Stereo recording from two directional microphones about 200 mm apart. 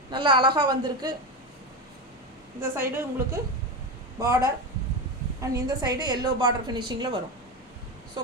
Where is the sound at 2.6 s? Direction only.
10° right (ahead or behind).